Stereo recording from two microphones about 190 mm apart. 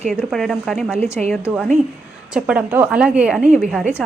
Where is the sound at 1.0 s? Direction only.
35° right (ahead or behind).